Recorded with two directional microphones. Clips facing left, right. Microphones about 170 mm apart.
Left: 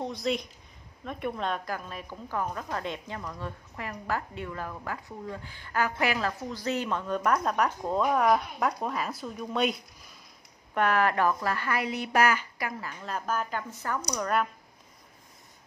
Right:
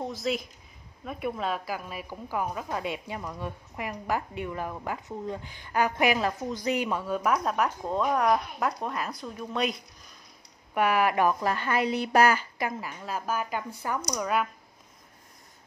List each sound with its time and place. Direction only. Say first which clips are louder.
0.0 s a woman's voice: even; centre (ahead or behind)
10.7 s a woman's voice: right 1 dB; 10° right (ahead or behind)
13.0 s a woman's voice: even; 5° right (ahead or behind)